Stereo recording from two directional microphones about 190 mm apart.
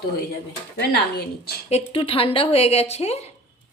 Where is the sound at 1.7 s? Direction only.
30° left (ahead or behind).